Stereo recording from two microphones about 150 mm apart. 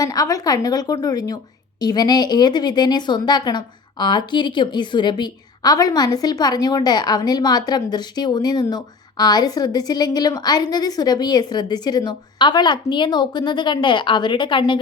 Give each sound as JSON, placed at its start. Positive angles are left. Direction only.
{"t": 0.0, "sound": "speech", "side_deg": 25}